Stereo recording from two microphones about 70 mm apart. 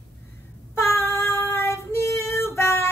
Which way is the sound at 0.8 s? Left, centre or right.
Left.